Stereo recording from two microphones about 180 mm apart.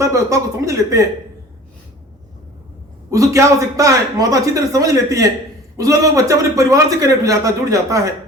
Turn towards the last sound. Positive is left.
turn(degrees=-20)  # may be behind; listen again after turning